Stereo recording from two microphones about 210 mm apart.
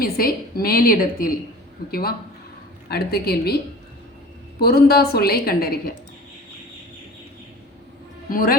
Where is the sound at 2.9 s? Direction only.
50° left (ahead or behind).